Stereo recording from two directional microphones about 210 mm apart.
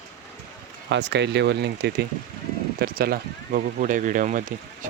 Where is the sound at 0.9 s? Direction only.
55° right (ahead or behind); by 4.5 s 40° right (ahead or behind).